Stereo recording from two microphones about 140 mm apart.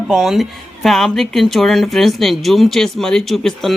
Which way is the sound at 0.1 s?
Centre (ahead or behind).